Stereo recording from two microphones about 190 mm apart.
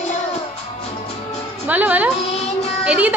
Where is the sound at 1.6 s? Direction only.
10° right (ahead or behind).